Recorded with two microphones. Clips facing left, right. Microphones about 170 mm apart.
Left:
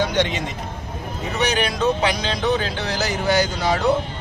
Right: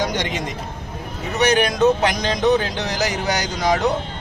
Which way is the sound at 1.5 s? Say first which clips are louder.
Right 5 dB; 15° right (ahead or behind).